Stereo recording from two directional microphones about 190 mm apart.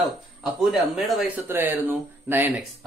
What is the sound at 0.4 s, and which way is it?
Speech, centre (ahead or behind).